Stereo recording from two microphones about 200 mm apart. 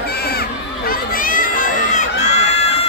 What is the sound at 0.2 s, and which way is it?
Crowd, 50° left (ahead or behind).